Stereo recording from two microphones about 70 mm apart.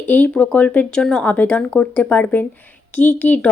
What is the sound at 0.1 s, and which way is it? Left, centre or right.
Speech, left.